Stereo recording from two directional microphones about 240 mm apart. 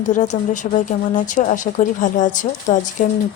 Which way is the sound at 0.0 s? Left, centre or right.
Left.